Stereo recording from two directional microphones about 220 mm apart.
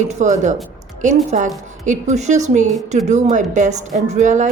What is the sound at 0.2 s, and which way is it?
A woman's voice, 35° right (ahead or behind).